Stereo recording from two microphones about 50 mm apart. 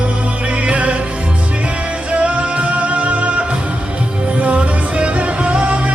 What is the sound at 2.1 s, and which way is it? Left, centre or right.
Music, right.